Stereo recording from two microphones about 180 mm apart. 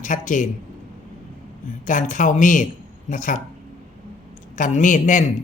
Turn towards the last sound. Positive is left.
turn(degrees=45)  # may be behind; listen again after turning